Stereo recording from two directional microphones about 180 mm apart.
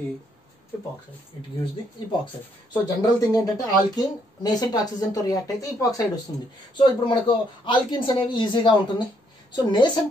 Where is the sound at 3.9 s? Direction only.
20° left (ahead or behind).